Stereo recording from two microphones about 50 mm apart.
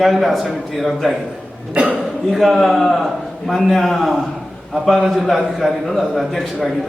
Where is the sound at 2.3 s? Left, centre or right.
Centre.